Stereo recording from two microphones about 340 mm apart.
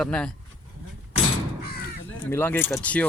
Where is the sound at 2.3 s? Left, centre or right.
Centre.